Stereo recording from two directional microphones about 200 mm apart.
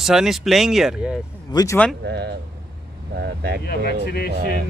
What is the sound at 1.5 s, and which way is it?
Speech, 15° left (ahead or behind).